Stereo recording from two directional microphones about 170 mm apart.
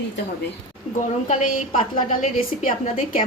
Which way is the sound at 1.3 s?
50° left (ahead or behind).